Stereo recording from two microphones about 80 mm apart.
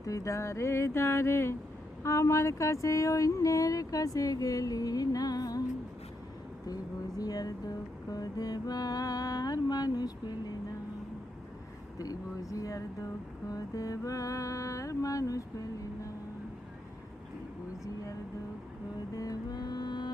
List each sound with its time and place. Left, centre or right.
0.0 s speech: left
7.2 s speech: left
11.9 s speech: left
19.1 s music: left